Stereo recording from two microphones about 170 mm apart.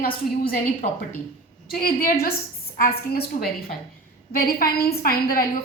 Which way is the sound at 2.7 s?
60° left (ahead or behind).